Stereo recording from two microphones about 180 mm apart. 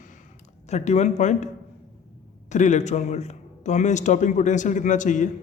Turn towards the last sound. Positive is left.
turn(degrees=45)  # may be behind; listen again after turning